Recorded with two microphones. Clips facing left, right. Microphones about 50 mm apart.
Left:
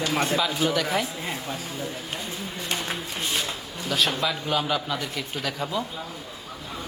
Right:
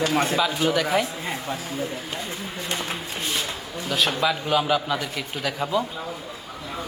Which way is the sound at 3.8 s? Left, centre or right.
Centre.